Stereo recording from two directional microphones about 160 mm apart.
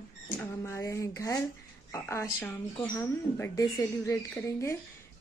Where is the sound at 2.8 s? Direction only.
20° left (ahead or behind).